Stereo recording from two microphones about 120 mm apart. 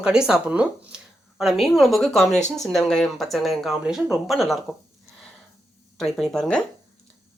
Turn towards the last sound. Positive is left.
turn(degrees=5)  # may be behind; listen again after turning